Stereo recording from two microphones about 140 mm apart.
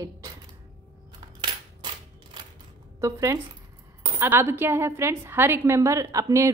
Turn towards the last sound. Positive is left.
turn(degrees=-20)  # may be behind; listen again after turning